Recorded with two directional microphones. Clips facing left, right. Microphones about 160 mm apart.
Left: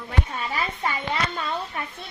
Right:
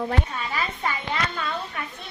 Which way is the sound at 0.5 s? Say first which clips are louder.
Left 1 dB; 30° left (ahead or behind).